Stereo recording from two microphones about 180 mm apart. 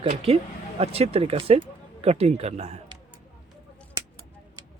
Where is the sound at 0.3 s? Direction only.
30° right (ahead or behind).